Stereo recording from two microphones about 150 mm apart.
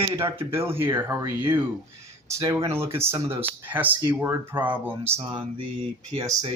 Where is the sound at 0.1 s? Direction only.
15° right (ahead or behind).